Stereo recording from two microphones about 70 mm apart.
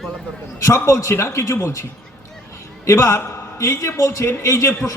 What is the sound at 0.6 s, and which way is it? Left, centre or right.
A man's voice, left.